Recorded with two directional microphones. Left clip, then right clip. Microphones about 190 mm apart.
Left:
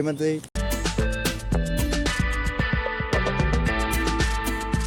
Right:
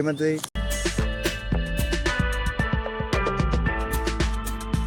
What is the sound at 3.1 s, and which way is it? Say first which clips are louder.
Music: right 1 dB; centre (ahead or behind).